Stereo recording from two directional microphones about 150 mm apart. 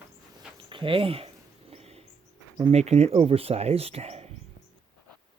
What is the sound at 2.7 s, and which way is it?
Speech, 45° right (ahead or behind).